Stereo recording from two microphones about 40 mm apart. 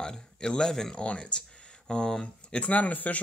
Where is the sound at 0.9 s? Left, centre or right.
Left.